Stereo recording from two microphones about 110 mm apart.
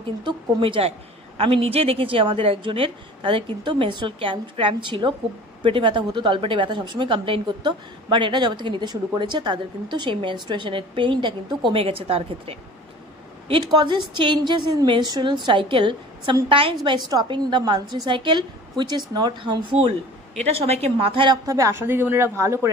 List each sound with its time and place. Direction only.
0.2 s a woman's voice: 50° right (ahead or behind)
13.5 s a woman's voice: 40° right (ahead or behind)
17.1 s a woman's voice: 40° right (ahead or behind)
20.3 s a woman's voice: 70° right (ahead or behind); by 21.4 s 55° right (ahead or behind)
21.5 s a woman's voice: 30° right (ahead or behind)